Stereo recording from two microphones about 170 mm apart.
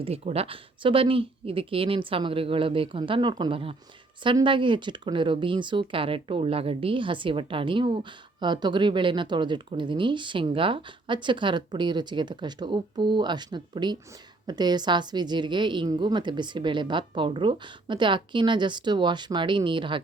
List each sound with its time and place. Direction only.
0.0 s speech: 35° right (ahead or behind)